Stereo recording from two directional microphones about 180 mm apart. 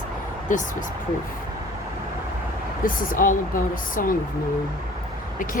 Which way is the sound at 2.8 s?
50° left (ahead or behind).